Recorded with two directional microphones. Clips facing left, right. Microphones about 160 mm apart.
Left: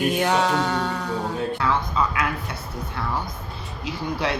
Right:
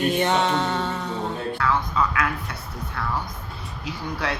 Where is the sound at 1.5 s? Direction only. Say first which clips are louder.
Right 2 dB; 20° left (ahead or behind).